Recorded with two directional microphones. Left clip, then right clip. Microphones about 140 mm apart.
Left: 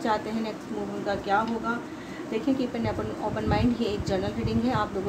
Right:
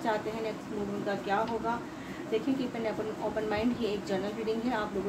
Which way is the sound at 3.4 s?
40° left (ahead or behind).